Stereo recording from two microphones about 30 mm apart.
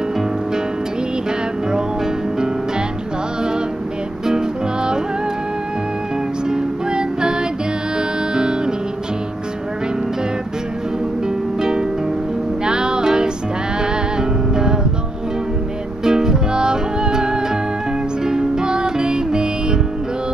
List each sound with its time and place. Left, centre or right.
4.3 s music: right
6.5 s music: right
12.6 s music: right
14.5 s music: right
16.0 s music: right